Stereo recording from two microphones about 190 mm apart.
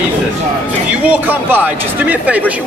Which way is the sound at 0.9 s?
10° right (ahead or behind).